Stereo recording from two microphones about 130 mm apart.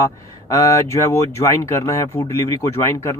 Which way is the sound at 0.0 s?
25° left (ahead or behind).